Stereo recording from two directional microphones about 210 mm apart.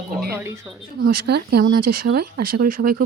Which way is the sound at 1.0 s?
50° right (ahead or behind).